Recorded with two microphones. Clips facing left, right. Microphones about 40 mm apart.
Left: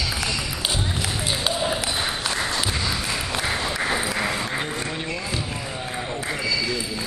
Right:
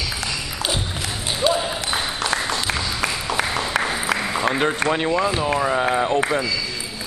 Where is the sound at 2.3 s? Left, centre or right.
Right.